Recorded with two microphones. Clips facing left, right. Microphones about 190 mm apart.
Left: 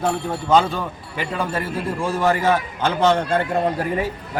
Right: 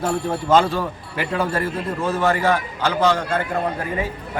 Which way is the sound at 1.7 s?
10° left (ahead or behind).